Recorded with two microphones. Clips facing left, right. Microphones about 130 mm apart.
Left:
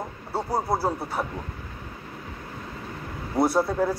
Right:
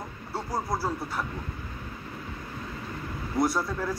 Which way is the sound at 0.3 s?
55° left (ahead or behind).